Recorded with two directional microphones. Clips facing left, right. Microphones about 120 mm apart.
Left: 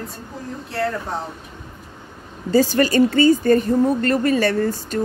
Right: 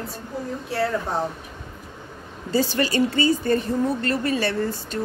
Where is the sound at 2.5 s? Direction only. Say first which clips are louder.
Left 6 dB; 45° left (ahead or behind).